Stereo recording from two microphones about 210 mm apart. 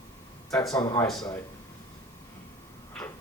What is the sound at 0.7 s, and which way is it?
Speech, 15° left (ahead or behind).